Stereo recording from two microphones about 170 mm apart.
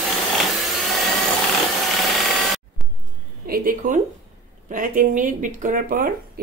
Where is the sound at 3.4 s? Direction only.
60° right (ahead or behind).